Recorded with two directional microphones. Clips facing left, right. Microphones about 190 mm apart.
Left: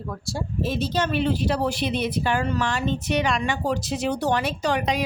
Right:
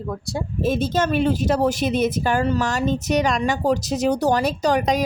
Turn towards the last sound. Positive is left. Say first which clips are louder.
# right 4 dB
turn(degrees=-45)  # may be behind; listen again after turning